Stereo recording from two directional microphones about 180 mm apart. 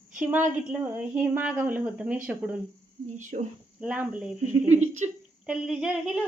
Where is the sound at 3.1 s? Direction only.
45° right (ahead or behind).